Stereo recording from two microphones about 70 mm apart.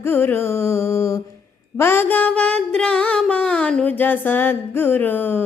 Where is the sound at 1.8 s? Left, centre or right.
Left; by 3.8 s centre.